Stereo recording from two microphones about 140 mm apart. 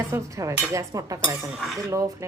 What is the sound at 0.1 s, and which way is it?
A woman's voice, 25° right (ahead or behind).